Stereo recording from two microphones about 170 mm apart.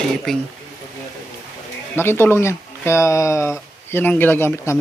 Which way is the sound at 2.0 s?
15° left (ahead or behind).